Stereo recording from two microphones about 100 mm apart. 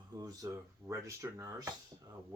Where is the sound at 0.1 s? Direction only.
35° right (ahead or behind).